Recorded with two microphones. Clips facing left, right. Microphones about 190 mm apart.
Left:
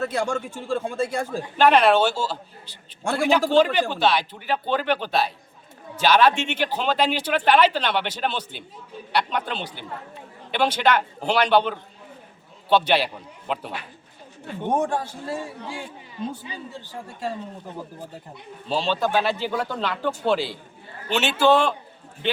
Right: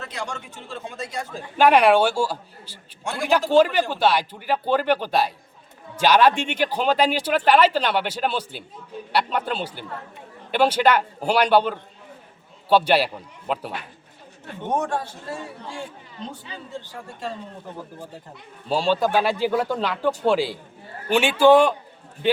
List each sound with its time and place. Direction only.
0.0 s a man's voice: 45° left (ahead or behind)
1.5 s a man's voice: 10° right (ahead or behind)
14.7 s a man's voice: 10° left (ahead or behind)
18.7 s speech: 10° right (ahead or behind)